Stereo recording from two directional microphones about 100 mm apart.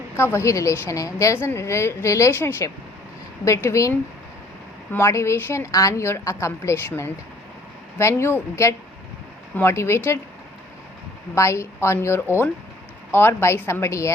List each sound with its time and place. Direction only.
0.2 s a woman's voice: 25° left (ahead or behind)
11.3 s a woman's voice: 30° left (ahead or behind)